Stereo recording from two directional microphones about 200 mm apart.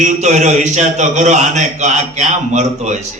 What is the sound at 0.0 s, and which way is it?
A man's voice, 35° right (ahead or behind).